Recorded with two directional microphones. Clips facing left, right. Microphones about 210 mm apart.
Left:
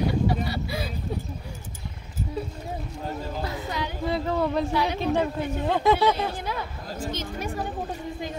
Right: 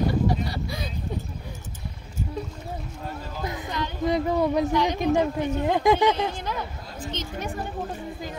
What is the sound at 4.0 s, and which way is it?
Speech, 15° right (ahead or behind).